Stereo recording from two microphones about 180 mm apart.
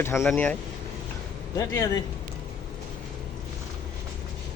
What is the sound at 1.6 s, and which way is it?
Speech, 15° left (ahead or behind).